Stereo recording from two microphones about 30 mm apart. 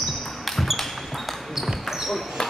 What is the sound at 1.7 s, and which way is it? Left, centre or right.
Basketball bounce, centre.